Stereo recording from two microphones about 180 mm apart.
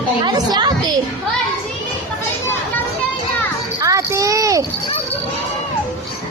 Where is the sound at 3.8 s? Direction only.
15° right (ahead or behind).